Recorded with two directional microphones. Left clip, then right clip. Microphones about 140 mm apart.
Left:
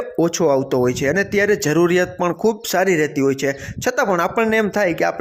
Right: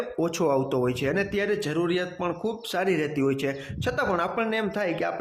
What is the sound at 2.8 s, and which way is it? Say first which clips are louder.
A man's voice: left 7 dB; 35° left (ahead or behind).